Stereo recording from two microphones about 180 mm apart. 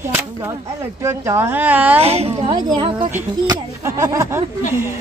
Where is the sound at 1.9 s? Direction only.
35° right (ahead or behind).